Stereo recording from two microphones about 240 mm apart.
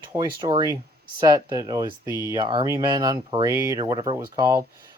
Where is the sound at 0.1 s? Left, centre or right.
Centre.